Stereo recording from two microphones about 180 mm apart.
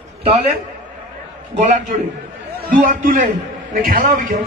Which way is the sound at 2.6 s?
50° right (ahead or behind).